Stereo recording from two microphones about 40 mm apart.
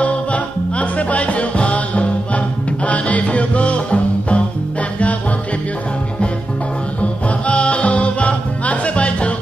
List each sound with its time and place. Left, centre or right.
0.0 s music: left
7.0 s music: left